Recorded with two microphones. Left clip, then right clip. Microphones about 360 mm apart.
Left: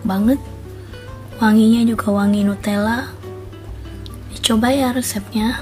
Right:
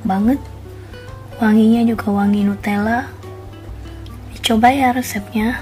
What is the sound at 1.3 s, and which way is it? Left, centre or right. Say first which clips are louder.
Speech: even; left.